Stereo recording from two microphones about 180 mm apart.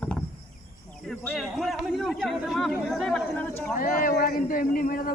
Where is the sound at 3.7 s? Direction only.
50° left (ahead or behind).